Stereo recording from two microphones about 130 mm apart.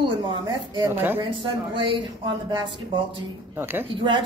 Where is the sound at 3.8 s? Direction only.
40° right (ahead or behind).